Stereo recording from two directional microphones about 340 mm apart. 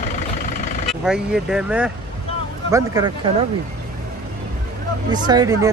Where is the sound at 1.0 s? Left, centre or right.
Centre.